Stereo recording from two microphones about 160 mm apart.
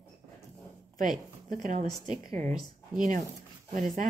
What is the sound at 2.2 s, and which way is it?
Speech, 20° left (ahead or behind).